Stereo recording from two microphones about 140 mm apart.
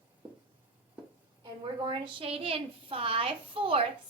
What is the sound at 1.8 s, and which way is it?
A woman's voice, 40° right (ahead or behind).